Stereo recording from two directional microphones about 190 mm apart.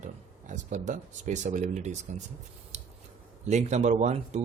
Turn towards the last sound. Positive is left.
turn(degrees=-40)  # may be behind; listen again after turning